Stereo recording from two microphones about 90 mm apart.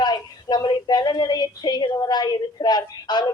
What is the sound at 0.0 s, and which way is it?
A woman's voice, 55° left (ahead or behind).